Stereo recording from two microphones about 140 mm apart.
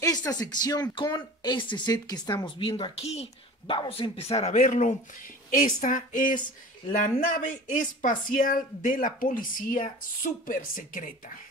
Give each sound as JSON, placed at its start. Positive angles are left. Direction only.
{"t": 0.0, "sound": "speech", "side_deg": 25}
{"t": 3.7, "sound": "a woman's voice", "side_deg": 35}
{"t": 7.7, "sound": "a woman's voice", "side_deg": 70}